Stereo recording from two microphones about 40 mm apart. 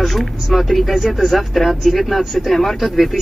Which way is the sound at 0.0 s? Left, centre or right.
Centre.